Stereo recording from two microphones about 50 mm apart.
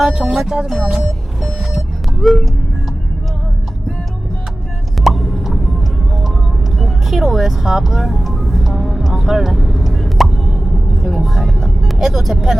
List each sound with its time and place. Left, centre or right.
0.0 s speech: centre
1.0 s reversing beeps: centre
2.1 s music: centre
5.0 s a sound: centre
6.7 s music: centre